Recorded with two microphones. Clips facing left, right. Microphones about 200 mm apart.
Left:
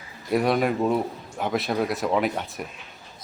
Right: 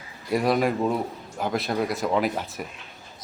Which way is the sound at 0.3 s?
Centre (ahead or behind).